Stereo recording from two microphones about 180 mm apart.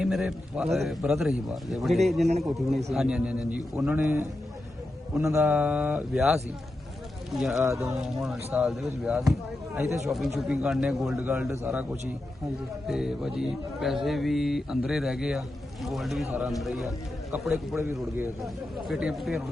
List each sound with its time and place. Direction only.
0.0 s a man's voice: 5° right (ahead or behind)
5.4 s a man's voice: 5° right (ahead or behind)
7.6 s speech: 15° right (ahead or behind)
7.9 s a man's voice: 5° right (ahead or behind)
9.7 s speech: 15° right (ahead or behind)
10.1 s a man's voice: centre (ahead or behind)
12.9 s a man's voice: 5° right (ahead or behind)
18.9 s a man's voice: 5° right (ahead or behind)